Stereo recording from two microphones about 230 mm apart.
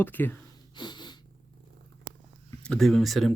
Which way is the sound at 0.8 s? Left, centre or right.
Centre.